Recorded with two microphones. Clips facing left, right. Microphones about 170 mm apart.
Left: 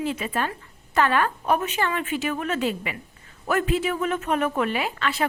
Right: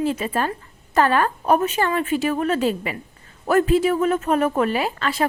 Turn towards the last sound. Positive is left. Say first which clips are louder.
# right 4 dB
turn(degrees=-40)  # may be behind; listen again after turning